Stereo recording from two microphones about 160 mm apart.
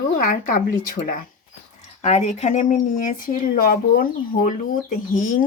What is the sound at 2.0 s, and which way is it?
Speech, 45° left (ahead or behind).